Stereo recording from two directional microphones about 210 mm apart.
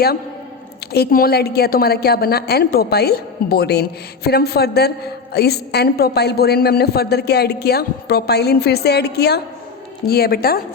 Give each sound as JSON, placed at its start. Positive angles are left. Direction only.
{"t": 0.9, "sound": "a woman's voice", "side_deg": 45}